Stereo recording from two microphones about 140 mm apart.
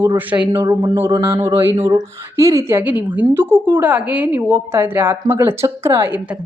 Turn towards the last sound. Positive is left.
turn(degrees=-15)  # may be behind; listen again after turning